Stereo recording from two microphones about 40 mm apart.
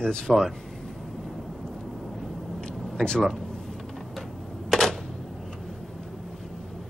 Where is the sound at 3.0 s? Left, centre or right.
Centre.